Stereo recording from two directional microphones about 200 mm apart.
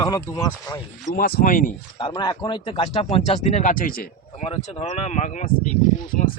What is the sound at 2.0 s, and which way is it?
Speech, 25° left (ahead or behind).